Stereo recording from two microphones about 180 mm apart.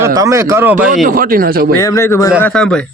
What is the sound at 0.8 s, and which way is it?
Speech, 50° right (ahead or behind).